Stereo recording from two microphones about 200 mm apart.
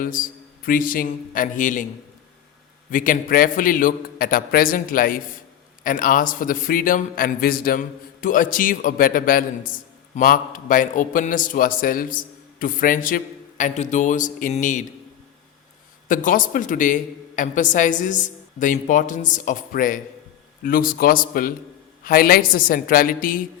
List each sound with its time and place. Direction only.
0.0 s a man's voice: 45° left (ahead or behind)
2.9 s a man's voice: 40° left (ahead or behind)
16.0 s a man's voice: 40° left (ahead or behind)